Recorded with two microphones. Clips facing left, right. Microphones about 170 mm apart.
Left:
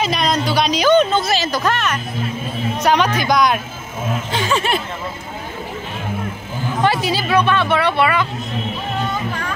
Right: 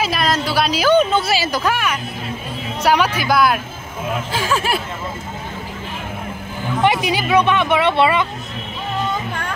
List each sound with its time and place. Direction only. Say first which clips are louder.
0.0 s a sound: left 1 dB; 5° right (ahead or behind)
2.8 s speech: even; 5° right (ahead or behind)
6.8 s speech: right 1 dB; 15° right (ahead or behind)